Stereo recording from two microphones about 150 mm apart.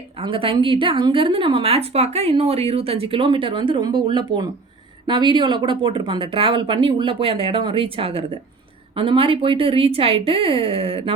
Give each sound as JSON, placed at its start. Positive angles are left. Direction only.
{"t": 0.2, "sound": "a woman's voice", "side_deg": -35}